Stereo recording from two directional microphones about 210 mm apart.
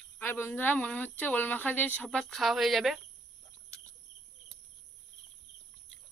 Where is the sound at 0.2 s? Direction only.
10° left (ahead or behind).